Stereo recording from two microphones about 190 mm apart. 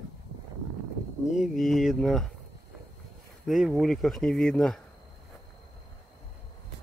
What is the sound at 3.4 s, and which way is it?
Speech, centre (ahead or behind).